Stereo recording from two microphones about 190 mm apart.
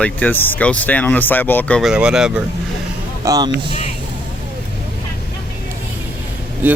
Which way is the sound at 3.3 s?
20° right (ahead or behind).